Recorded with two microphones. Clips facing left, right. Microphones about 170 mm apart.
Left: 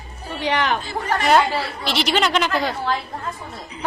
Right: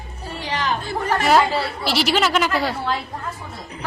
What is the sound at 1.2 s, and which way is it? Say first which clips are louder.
A woman's voice: even; 5° right (ahead or behind).